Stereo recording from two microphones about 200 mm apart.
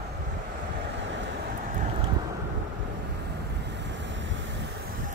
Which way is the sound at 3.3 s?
60° right (ahead or behind).